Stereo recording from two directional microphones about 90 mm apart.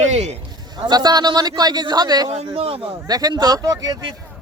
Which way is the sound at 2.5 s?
90° right.